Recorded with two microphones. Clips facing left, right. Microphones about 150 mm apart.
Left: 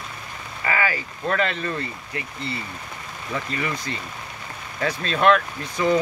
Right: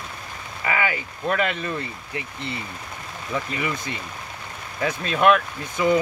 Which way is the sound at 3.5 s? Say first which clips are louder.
Even; 15° right (ahead or behind).